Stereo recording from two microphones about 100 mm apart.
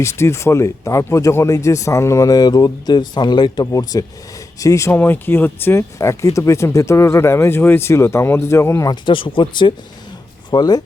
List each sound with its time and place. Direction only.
0.0 s speech: 30° left (ahead or behind)
4.9 s speech: 20° left (ahead or behind)
8.9 s speech: 55° left (ahead or behind)
10.5 s speech: 40° left (ahead or behind)